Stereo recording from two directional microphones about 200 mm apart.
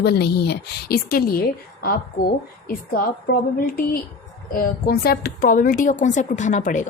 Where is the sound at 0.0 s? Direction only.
55° left (ahead or behind).